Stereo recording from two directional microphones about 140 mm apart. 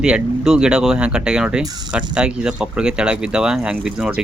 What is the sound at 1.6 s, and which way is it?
Speech, 30° right (ahead or behind).